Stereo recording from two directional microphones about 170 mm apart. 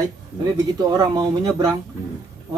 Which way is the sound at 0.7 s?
20° right (ahead or behind).